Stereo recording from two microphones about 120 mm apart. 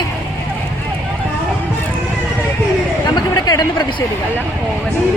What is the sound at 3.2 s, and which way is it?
Chatter, 35° left (ahead or behind).